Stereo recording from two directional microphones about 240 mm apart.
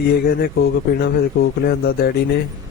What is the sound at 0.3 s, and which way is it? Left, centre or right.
Speech, left.